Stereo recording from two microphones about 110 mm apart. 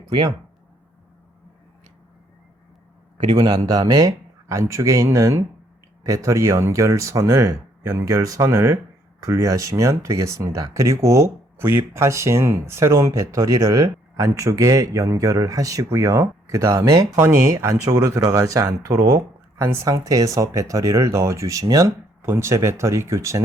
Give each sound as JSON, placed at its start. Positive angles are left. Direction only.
{"t": 3.2, "sound": "a man's voice", "side_deg": -45}